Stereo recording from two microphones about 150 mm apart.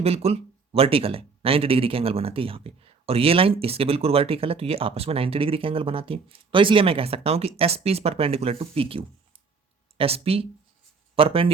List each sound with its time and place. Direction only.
0.0 s speech: 40° right (ahead or behind)